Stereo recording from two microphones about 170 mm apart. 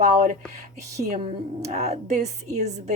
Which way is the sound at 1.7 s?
40° right (ahead or behind).